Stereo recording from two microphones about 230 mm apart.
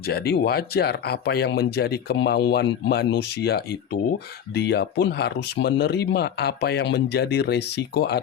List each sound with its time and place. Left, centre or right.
0.0 s speech: left